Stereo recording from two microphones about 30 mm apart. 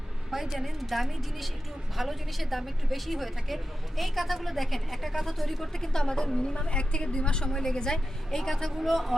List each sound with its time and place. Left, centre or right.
0.3 s a woman's voice: centre
5.7 s a woman's voice: centre
7.5 s a woman's voice: centre